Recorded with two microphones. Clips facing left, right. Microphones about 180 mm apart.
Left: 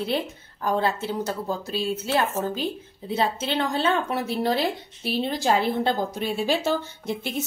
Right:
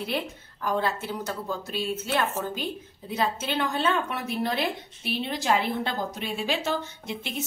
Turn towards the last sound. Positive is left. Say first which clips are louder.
# left 5 dB
turn(degrees=35)  # may be behind; listen again after turning